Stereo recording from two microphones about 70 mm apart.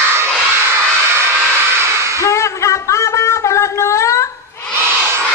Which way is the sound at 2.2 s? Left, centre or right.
Left.